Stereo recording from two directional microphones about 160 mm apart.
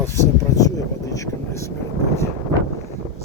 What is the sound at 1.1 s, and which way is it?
Vehicle, 20° left (ahead or behind).